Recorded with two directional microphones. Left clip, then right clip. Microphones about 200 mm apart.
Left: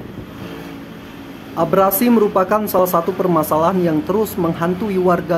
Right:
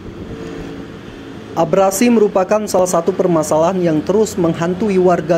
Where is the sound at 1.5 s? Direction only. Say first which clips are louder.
Right 2 dB; 15° right (ahead or behind).